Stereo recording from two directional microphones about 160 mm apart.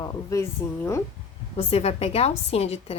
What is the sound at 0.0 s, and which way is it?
Speech, 20° left (ahead or behind).